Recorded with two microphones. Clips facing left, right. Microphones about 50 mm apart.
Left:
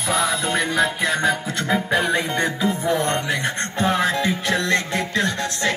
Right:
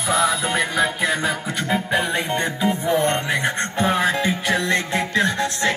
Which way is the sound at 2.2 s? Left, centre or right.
Right.